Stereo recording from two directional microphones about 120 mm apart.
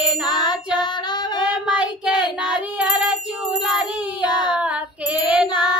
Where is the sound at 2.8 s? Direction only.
10° right (ahead or behind).